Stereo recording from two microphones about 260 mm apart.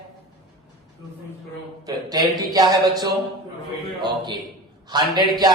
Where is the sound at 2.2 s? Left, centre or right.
Centre.